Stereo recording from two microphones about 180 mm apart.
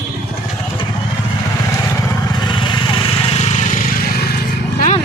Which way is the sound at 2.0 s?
25° left (ahead or behind).